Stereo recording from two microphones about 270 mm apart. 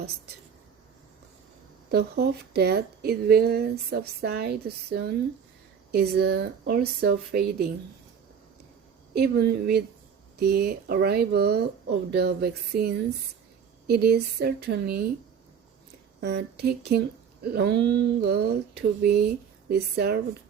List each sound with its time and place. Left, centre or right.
1.9 s speech: right
9.1 s speech: right
16.2 s speech: right